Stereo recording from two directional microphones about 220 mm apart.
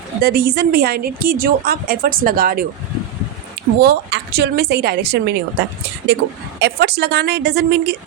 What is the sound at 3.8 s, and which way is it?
A woman's voice, 50° right (ahead or behind).